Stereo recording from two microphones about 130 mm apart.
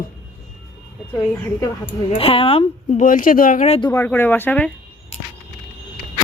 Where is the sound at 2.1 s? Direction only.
45° left (ahead or behind).